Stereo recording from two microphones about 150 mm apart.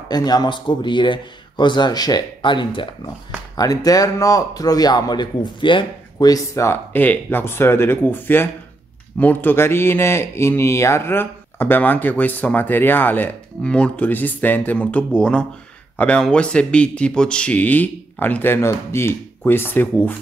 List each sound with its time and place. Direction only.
0.1 s speech: 25° left (ahead or behind)